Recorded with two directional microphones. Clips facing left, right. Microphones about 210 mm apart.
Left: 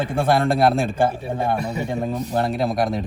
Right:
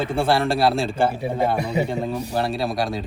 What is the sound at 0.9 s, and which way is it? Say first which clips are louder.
Speech: even; 10° right (ahead or behind).